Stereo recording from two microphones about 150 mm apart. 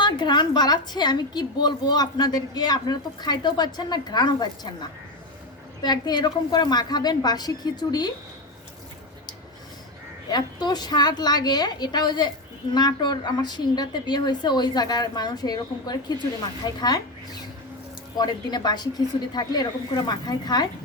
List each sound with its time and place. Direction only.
0.0 s a woman's voice: 30° left (ahead or behind)
10.2 s a woman's voice: 25° left (ahead or behind)